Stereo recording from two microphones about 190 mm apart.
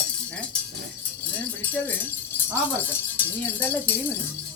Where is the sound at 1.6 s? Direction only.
10° left (ahead or behind).